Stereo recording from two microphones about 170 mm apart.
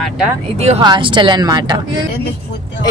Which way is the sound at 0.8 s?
25° right (ahead or behind).